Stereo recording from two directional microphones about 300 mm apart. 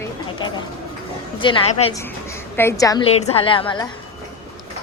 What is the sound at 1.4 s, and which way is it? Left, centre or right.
Speech, centre.